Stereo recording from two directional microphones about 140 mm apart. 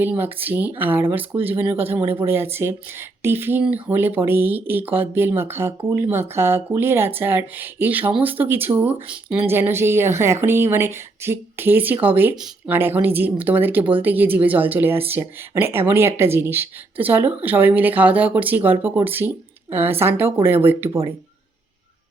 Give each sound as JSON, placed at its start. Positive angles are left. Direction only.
{"t": 0.0, "sound": "speech", "side_deg": -15}